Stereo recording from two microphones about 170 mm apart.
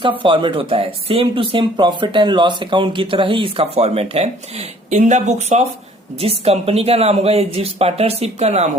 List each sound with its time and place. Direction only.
0.0 s speech: 30° right (ahead or behind)